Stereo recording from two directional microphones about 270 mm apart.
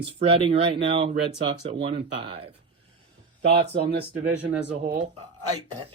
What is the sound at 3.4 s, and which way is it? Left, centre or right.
Speech, right.